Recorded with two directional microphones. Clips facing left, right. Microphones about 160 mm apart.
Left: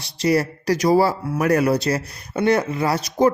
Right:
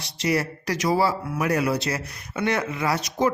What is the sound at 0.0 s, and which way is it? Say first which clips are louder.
Speech: left 5 dB; 35° left (ahead or behind).